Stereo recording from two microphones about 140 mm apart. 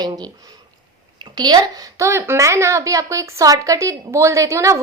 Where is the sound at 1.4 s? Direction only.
30° right (ahead or behind).